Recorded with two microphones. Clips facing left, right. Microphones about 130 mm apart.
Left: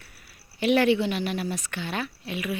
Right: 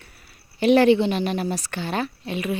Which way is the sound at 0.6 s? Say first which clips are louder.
Right 5 dB; 35° right (ahead or behind).